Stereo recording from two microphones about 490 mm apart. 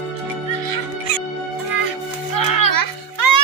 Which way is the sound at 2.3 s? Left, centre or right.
Left.